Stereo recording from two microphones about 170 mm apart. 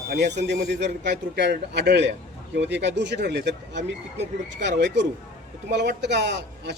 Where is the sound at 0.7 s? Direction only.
90° right.